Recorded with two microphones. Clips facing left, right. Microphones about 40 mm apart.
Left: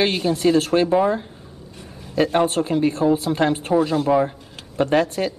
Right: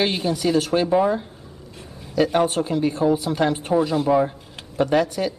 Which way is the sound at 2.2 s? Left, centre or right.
Left.